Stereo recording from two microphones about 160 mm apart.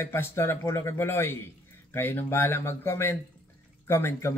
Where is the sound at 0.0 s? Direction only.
15° left (ahead or behind).